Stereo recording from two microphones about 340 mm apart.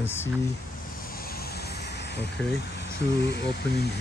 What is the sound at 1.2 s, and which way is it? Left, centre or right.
Vehicle, left.